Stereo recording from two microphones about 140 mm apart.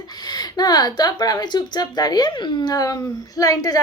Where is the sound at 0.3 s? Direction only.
30° left (ahead or behind).